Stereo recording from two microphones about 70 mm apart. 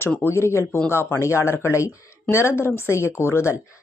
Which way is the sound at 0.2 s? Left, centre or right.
Left.